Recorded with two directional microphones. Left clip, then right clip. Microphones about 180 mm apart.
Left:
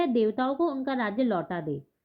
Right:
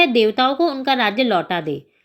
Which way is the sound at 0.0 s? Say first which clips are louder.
Right 11 dB; 15° right (ahead or behind).